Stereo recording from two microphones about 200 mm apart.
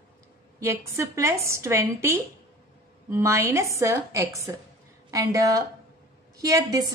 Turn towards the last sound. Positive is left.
turn(degrees=-20)  # may be behind; listen again after turning